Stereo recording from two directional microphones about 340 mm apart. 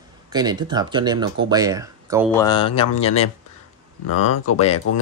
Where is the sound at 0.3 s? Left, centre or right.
Centre.